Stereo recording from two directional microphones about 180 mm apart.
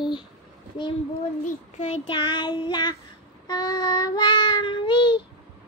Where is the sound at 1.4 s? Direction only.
35° left (ahead or behind).